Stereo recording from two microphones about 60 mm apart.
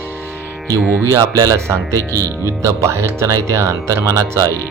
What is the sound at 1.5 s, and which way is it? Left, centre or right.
Speech, right.